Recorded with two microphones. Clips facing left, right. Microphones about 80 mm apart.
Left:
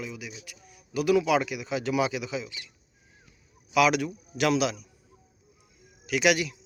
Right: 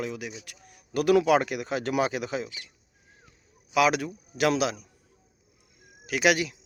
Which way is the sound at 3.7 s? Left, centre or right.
Right.